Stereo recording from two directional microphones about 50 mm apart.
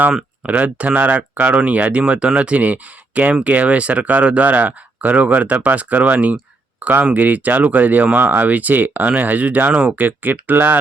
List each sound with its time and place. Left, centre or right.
0.4 s speech: right